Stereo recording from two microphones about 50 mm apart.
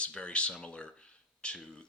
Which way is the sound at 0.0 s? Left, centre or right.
Left.